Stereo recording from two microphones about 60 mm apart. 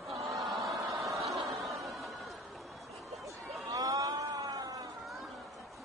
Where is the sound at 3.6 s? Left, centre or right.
Right.